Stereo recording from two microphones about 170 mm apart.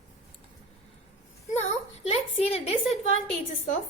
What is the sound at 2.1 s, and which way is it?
Speech, 35° left (ahead or behind).